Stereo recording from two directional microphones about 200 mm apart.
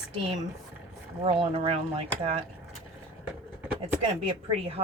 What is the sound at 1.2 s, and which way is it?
Speech, 30° right (ahead or behind).